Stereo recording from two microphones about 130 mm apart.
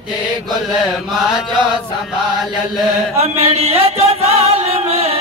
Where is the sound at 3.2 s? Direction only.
50° right (ahead or behind).